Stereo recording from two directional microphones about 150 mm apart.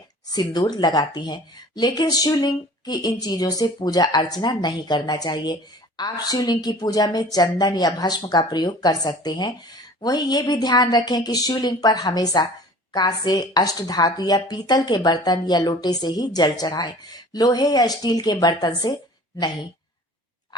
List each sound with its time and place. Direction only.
0.3 s speech: 25° left (ahead or behind)